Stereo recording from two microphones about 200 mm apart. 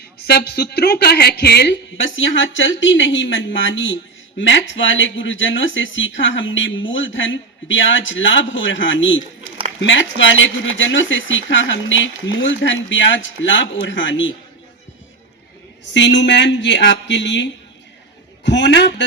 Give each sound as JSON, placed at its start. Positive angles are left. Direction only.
{"t": 0.3, "sound": "speech", "side_deg": 55}
{"t": 15.9, "sound": "speech", "side_deg": 65}